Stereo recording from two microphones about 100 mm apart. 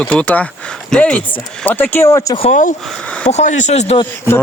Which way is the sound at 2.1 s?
35° left (ahead or behind).